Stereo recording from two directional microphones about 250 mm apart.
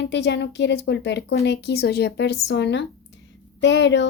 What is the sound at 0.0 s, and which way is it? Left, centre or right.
A woman's voice, left.